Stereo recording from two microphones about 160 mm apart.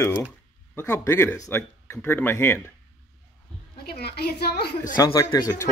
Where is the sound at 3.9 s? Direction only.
80° left.